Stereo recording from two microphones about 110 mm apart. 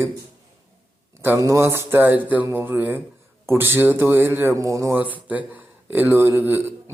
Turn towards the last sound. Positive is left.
turn(degrees=-20)  # may be behind; listen again after turning